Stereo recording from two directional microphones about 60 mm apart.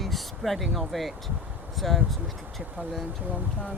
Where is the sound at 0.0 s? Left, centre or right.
Centre.